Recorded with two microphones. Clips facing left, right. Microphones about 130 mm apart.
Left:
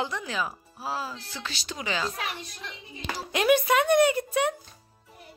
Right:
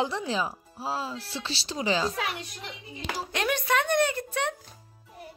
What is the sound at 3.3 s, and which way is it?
A woman's voice, 10° left (ahead or behind).